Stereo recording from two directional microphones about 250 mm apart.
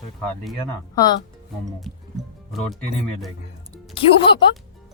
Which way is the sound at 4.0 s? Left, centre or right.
Left.